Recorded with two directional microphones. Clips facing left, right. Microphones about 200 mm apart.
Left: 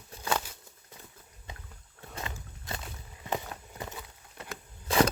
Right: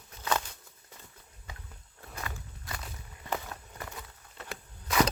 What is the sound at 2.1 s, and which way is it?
Walk, 25° left (ahead or behind).